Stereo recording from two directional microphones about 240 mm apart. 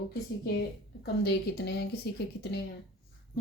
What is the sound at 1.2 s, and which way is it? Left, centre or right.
Speech, left.